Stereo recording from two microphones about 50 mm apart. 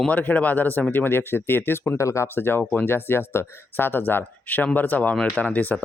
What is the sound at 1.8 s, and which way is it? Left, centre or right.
Speech, left.